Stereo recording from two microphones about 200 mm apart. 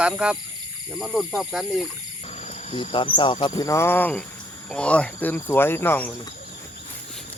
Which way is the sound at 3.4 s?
20° left (ahead or behind).